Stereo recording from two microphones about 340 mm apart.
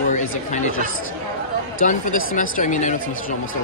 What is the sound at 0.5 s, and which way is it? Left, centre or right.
Speech, left.